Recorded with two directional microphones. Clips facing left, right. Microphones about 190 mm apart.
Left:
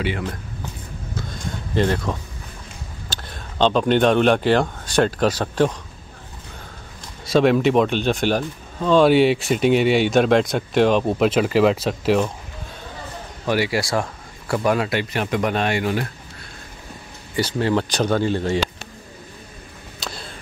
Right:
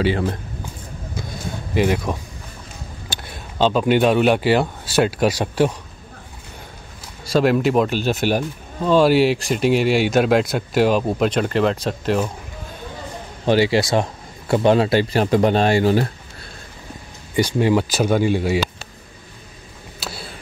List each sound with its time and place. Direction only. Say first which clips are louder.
0.0 s speech: right 5 dB; 30° right (ahead or behind)
1.7 s speech: right 1 dB; 10° right (ahead or behind)
7.2 s speech: left 1 dB; centre (ahead or behind)
13.5 s speech: right 5 dB; 25° right (ahead or behind)
17.4 s speech: right 3 dB; 15° right (ahead or behind)
20.0 s a sound: right 1 dB; 5° right (ahead or behind)